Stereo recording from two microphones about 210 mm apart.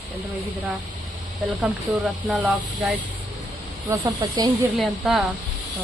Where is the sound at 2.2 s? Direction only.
5° right (ahead or behind).